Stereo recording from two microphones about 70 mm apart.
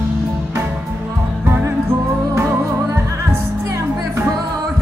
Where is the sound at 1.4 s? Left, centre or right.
Right.